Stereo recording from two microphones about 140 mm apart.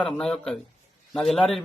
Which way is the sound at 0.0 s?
5° left (ahead or behind).